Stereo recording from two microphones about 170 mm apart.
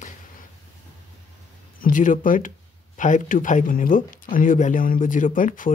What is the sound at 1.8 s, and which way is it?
Speech, 50° left (ahead or behind).